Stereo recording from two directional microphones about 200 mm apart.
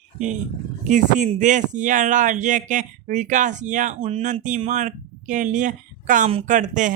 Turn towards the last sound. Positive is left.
turn(degrees=-40)  # may be behind; listen again after turning